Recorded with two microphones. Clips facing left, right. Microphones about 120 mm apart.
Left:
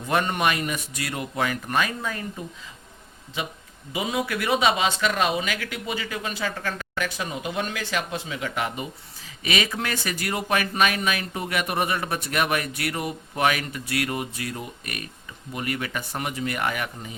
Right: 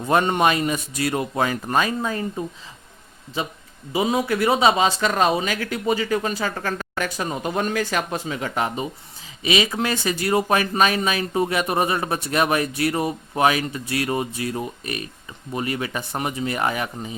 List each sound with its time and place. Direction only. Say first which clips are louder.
0.2 s speech: right 3 dB; 25° right (ahead or behind)